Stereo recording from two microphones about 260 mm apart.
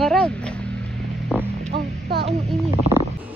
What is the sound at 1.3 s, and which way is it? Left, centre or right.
Hum, centre.